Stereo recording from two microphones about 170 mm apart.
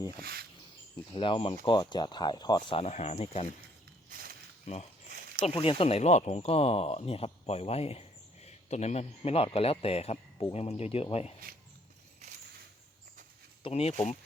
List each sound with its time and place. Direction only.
0.2 s speech: 65° right (ahead or behind)
1.1 s speech: 30° left (ahead or behind)
4.6 s speech: 40° left (ahead or behind)
13.6 s speech: 35° left (ahead or behind)